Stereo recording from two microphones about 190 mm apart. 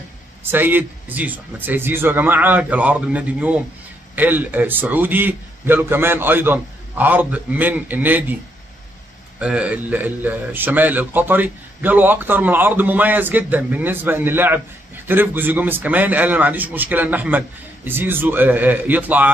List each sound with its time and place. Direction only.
0.5 s a man's voice: 10° right (ahead or behind)
9.4 s a man's voice: 5° right (ahead or behind)